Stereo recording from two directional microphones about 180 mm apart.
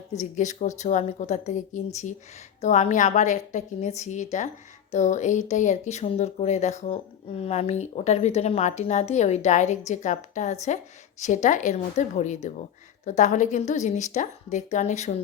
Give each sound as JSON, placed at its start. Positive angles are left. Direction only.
{"t": 0.1, "sound": "speech", "side_deg": 40}